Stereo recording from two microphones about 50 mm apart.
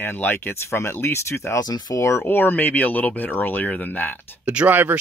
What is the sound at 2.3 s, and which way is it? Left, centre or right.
Speech, left.